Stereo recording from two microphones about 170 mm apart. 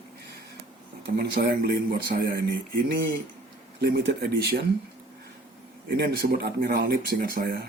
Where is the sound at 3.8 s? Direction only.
65° right (ahead or behind).